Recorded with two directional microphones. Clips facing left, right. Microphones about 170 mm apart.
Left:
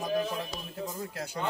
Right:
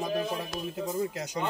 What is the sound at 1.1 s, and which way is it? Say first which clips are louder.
Speech: right 2 dB; 15° right (ahead or behind).